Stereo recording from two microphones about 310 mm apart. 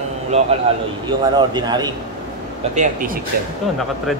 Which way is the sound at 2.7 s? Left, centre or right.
Right.